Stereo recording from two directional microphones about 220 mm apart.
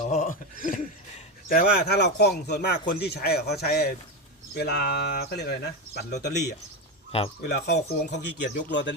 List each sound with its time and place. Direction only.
0.1 s speech: 35° left (ahead or behind)
7.4 s speech: 50° left (ahead or behind)